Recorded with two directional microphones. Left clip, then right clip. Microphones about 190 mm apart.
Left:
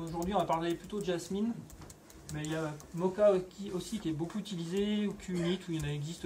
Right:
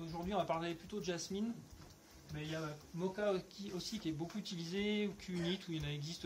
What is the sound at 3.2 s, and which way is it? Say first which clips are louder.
Speech: left 12 dB; 30° right (ahead or behind).